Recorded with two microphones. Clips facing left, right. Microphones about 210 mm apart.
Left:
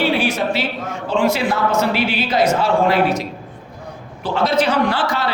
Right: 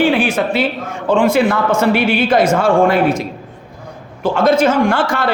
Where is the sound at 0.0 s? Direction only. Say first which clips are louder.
Right 4 dB; 50° right (ahead or behind).